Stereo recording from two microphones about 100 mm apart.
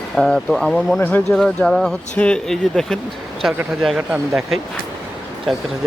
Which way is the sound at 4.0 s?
10° right (ahead or behind).